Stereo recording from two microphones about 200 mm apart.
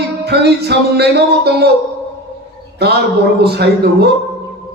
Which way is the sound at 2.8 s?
55° right (ahead or behind).